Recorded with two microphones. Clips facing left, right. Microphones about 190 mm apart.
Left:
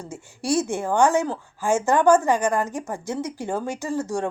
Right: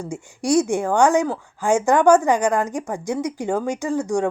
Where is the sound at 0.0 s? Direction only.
15° right (ahead or behind).